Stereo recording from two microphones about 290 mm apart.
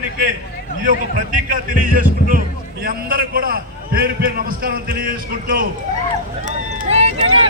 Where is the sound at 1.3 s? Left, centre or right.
Right.